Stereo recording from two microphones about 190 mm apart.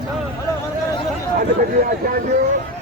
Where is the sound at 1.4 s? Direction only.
45° right (ahead or behind).